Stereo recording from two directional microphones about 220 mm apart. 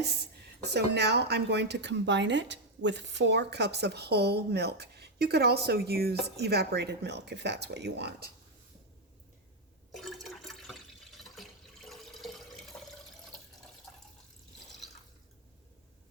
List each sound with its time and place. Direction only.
0.6 s a woman's voice: 50° right (ahead or behind)
9.9 s water: centre (ahead or behind)